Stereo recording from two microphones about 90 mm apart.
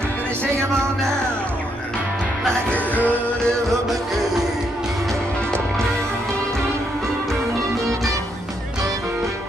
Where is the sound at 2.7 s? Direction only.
15° left (ahead or behind).